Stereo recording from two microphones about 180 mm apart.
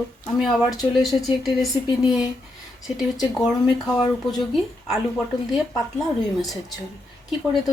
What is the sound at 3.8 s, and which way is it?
Speech, centre (ahead or behind).